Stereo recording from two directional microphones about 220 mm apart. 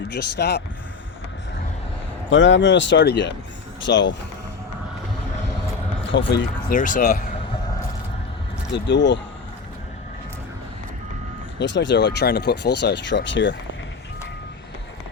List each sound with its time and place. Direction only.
0.1 s speech: 50° left (ahead or behind)
2.3 s speech: 55° left (ahead or behind)
6.1 s speech: 55° left (ahead or behind)
6.7 s speech: 35° left (ahead or behind)
8.7 s speech: 55° left (ahead or behind)
11.6 s speech: 55° left (ahead or behind)